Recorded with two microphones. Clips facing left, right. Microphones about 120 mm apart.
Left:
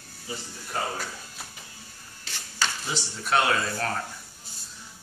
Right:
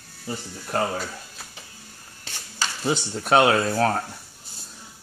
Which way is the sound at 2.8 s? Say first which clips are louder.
Right 8 dB; 50° right (ahead or behind).